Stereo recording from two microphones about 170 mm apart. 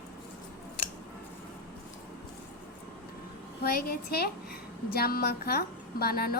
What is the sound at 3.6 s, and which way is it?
A woman's voice, 60° left (ahead or behind).